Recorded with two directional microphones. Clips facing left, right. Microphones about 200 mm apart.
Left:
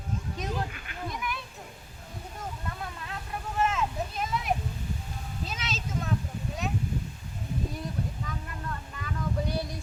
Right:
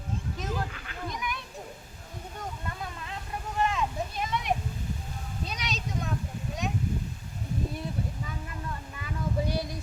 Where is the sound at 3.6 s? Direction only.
Centre (ahead or behind).